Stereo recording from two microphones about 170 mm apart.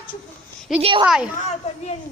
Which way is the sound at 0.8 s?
30° right (ahead or behind).